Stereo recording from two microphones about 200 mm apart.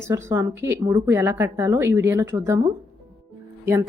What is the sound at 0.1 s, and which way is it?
Speech, 15° right (ahead or behind).